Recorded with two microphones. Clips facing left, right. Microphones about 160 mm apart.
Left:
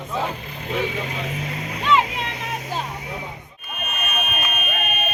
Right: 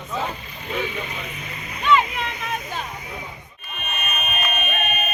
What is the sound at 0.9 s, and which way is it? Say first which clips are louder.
Speech: left 4 dB; 90° left.